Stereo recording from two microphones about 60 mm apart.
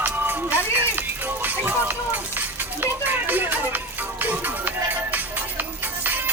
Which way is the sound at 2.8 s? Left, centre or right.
Right.